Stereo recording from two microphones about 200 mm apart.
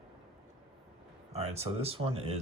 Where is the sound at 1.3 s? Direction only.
30° right (ahead or behind).